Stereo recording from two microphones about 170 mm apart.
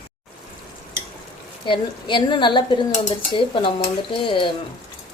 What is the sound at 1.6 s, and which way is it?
A woman's voice, 30° left (ahead or behind).